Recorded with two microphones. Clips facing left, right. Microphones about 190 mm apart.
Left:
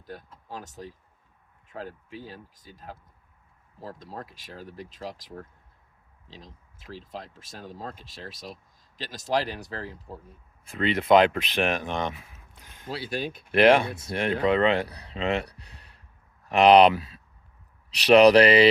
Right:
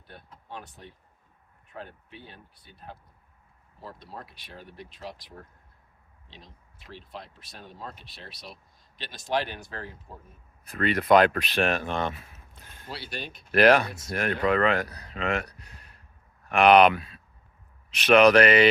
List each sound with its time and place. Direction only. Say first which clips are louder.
0.0 s speech: left 7 dB; 40° left (ahead or behind)
2.7 s speech: left 1 dB; 40° left (ahead or behind)
6.2 s speech: left 4 dB; 35° left (ahead or behind)
10.7 s speech: left 1 dB; 20° left (ahead or behind)